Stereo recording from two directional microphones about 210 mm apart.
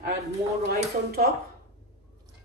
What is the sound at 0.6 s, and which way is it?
Speech, 50° right (ahead or behind).